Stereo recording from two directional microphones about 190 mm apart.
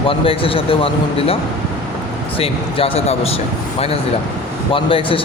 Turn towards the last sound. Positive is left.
turn(degrees=30)  # may be behind; listen again after turning